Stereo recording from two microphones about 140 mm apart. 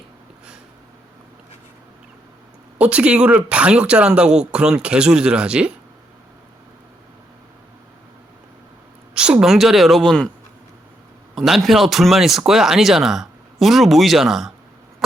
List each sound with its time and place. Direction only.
2.7 s speech: 10° right (ahead or behind)
9.1 s a woman's voice: 5° right (ahead or behind)
11.3 s speech: centre (ahead or behind)